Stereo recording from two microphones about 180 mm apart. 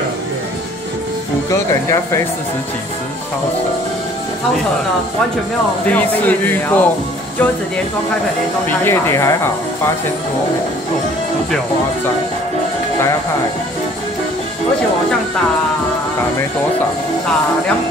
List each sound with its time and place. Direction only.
5.9 s speech: 10° left (ahead or behind)
8.6 s speech: 15° left (ahead or behind)